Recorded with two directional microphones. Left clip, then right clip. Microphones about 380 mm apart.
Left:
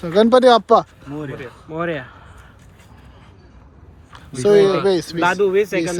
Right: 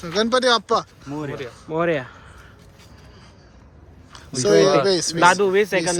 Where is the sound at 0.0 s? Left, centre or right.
Centre.